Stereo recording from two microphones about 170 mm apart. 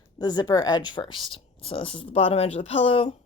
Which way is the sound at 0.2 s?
25° left (ahead or behind).